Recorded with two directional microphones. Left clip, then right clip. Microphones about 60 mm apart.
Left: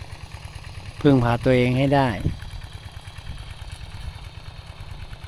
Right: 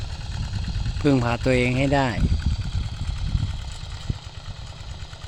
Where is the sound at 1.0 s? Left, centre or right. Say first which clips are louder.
Left 3 dB; left.